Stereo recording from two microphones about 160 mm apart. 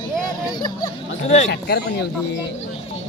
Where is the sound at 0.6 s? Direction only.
25° left (ahead or behind).